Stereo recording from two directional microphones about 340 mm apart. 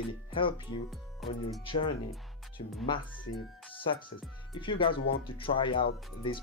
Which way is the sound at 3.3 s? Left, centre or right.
Left.